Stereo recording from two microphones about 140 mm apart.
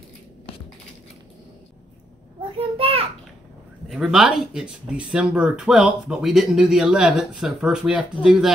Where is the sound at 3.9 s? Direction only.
Centre (ahead or behind).